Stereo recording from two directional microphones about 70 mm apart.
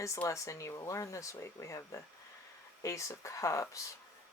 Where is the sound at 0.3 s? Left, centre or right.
Left.